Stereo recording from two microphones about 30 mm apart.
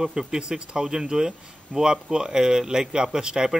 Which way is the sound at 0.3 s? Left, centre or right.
Right.